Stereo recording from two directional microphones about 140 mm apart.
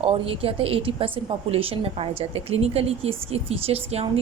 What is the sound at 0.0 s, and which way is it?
A woman's voice, 40° right (ahead or behind).